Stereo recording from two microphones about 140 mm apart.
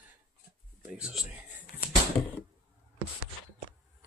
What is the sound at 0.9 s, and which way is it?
Speech, 5° right (ahead or behind).